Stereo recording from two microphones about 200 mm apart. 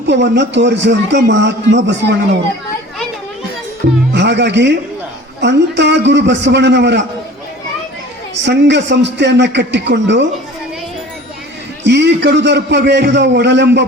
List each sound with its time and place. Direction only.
0.1 s a man's voice: 60° right (ahead or behind)
4.1 s a man's voice: 60° right (ahead or behind)
8.4 s a man's voice: 60° right (ahead or behind)
11.8 s a man's voice: 60° right (ahead or behind)